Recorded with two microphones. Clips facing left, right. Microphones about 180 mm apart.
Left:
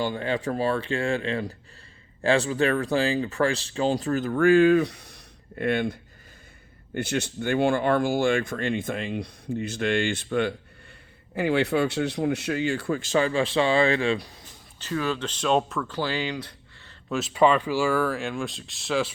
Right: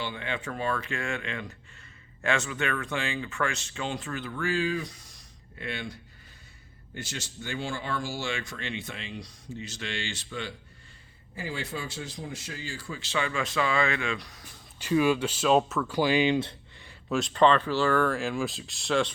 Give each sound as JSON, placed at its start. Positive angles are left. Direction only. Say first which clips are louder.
{"t": 0.0, "sound": "speech", "louder": "left 8 dB", "side_deg": 40}
{"t": 14.8, "sound": "speech", "louder": "right 4 dB", "side_deg": -15}
{"t": 16.0, "sound": "speech", "louder": "right 6 dB", "side_deg": -15}
{"t": 17.1, "sound": "speech", "louder": "left 1 dB", "side_deg": 5}